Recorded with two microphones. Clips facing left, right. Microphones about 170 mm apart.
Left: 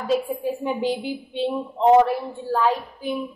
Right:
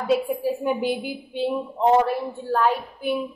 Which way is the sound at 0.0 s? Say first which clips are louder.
Right 1 dB; 10° right (ahead or behind).